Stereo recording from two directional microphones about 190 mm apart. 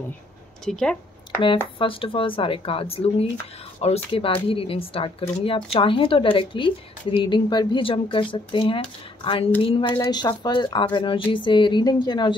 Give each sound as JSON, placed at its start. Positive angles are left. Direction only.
{"t": 0.7, "sound": "speech", "side_deg": 5}
{"t": 1.8, "sound": "speech", "side_deg": 30}